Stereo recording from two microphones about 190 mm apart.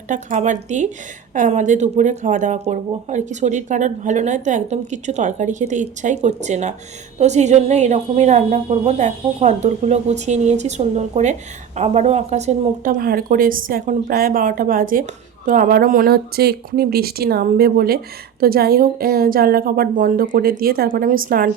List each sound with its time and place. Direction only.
0.1 s a woman's voice: 40° right (ahead or behind)